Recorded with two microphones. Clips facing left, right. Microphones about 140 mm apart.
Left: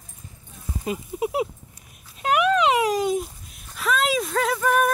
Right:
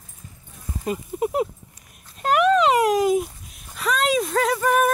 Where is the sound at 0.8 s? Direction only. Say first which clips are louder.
Right 2 dB; 5° left (ahead or behind).